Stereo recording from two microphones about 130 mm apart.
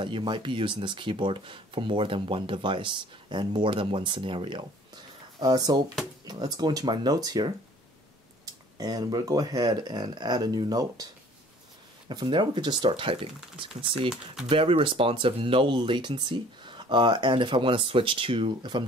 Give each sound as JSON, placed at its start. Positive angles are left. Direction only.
{"t": 0.0, "sound": "speech", "side_deg": -40}
{"t": 8.7, "sound": "speech", "side_deg": -30}
{"t": 12.1, "sound": "speech", "side_deg": -35}